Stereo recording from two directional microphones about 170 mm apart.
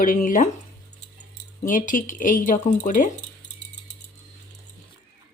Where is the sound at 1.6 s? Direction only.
50° left (ahead or behind).